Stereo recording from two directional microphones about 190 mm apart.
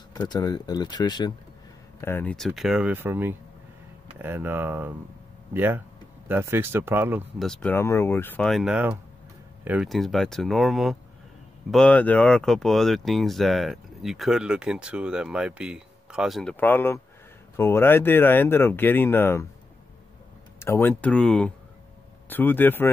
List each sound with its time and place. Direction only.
0.1 s speech: 20° left (ahead or behind)
2.0 s speech: 10° left (ahead or behind); by 7.2 s 10° right (ahead or behind)
7.3 s speech: 5° left (ahead or behind)
20.5 s speech: 15° left (ahead or behind)